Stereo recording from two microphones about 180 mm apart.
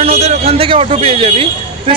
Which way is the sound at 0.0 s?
35° right (ahead or behind).